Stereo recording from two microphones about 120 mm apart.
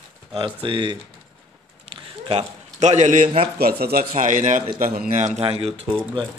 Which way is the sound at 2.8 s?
75° right (ahead or behind).